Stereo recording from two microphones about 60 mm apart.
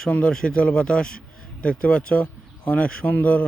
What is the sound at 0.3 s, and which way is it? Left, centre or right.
A man's voice, centre.